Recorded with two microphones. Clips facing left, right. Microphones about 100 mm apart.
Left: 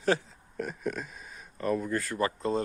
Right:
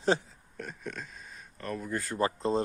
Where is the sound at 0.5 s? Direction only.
5° left (ahead or behind).